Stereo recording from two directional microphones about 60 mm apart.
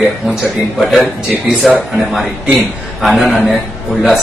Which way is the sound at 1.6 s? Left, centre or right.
Centre.